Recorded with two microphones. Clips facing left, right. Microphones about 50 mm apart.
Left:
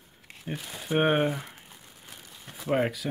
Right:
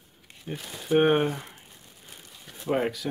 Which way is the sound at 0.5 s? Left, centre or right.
Centre.